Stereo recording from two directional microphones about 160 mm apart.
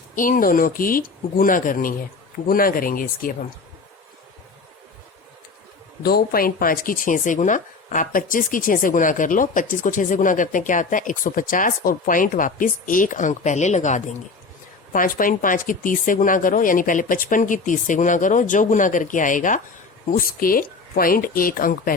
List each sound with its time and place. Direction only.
0.2 s speech: 60° left (ahead or behind)
6.0 s speech: 75° left (ahead or behind); by 14.2 s 45° left (ahead or behind)
14.9 s speech: 60° left (ahead or behind)